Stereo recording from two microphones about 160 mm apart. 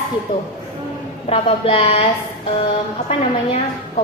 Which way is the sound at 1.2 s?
35° left (ahead or behind).